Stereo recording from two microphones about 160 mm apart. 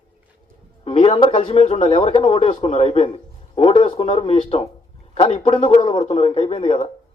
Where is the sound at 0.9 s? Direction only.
35° left (ahead or behind).